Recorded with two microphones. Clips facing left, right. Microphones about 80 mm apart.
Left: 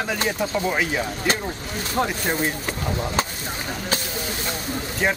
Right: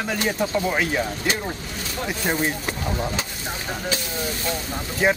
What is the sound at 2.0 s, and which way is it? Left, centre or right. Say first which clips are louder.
Speech: right 3 dB; centre.